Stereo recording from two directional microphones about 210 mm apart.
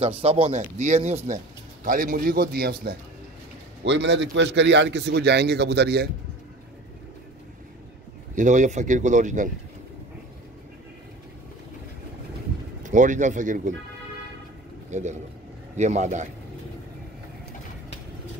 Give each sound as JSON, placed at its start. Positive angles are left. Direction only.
{"t": 0.2, "sound": "speech", "side_deg": -30}
{"t": 3.8, "sound": "a man's voice", "side_deg": -55}
{"t": 8.4, "sound": "speech", "side_deg": -35}
{"t": 12.8, "sound": "speech", "side_deg": -35}
{"t": 14.9, "sound": "speech", "side_deg": -35}